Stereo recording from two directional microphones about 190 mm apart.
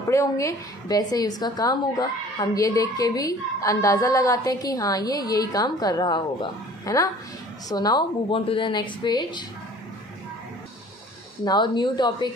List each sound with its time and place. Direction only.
0.1 s a woman's voice: 15° left (ahead or behind)
11.4 s a woman's voice: 25° left (ahead or behind)